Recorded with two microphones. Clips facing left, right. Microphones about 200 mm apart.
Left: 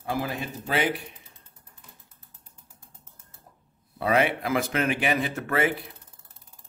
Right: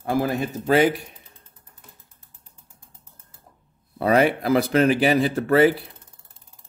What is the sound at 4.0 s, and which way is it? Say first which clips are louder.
Speech: right 5 dB; 40° right (ahead or behind).